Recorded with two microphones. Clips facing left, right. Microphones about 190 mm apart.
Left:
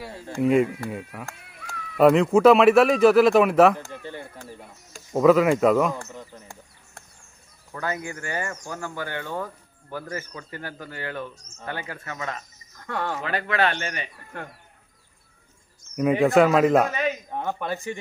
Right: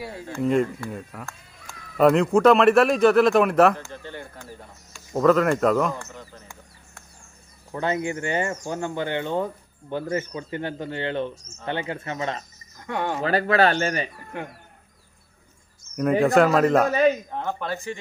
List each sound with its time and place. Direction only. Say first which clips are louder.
0.4 s speech: left 2 dB; 5° left (ahead or behind)
1.3 s a sound: left 4 dB; 65° left (ahead or behind)
2.0 s speech: left 1 dB; centre (ahead or behind)
5.1 s speech: left 2 dB; 5° left (ahead or behind)
7.7 s speech: right 5 dB; 25° right (ahead or behind)
12.8 s speech: right 2 dB; 15° right (ahead or behind)
13.2 s speech: right 6 dB; 35° right (ahead or behind)
16.0 s speech: even; centre (ahead or behind)